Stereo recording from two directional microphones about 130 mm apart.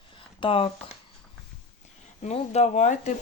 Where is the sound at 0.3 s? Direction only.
40° left (ahead or behind).